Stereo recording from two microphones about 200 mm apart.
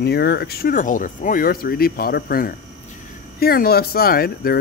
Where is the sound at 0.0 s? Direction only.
55° left (ahead or behind).